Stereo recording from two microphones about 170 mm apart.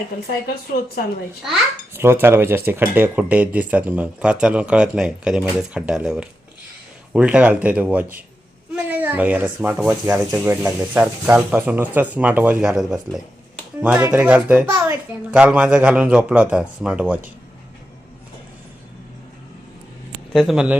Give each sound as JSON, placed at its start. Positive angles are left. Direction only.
{"t": 0.8, "sound": "speech", "side_deg": 60}
{"t": 1.9, "sound": "speech", "side_deg": -15}
{"t": 20.3, "sound": "speech", "side_deg": 0}